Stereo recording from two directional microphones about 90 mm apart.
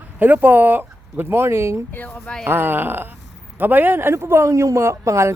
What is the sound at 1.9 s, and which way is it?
Speech, 20° left (ahead or behind).